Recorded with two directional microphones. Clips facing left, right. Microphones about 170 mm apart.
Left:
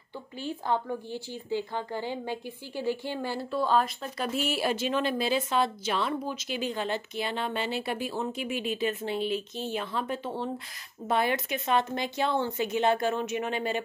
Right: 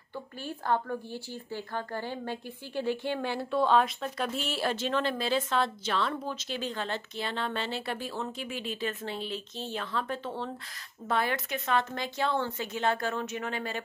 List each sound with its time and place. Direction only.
0.4 s a woman's voice: 15° left (ahead or behind)